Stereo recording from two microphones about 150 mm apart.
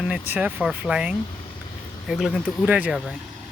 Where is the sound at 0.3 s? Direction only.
10° right (ahead or behind).